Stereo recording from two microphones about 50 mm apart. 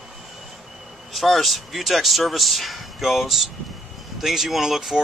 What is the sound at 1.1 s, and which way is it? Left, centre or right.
Speech, centre.